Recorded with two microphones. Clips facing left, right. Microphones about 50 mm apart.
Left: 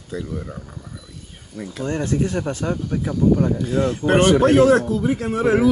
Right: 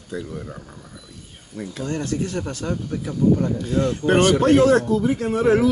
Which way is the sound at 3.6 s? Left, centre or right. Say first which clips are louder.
Left 1 dB; centre.